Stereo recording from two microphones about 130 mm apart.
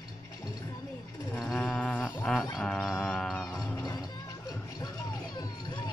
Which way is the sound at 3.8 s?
30° left (ahead or behind).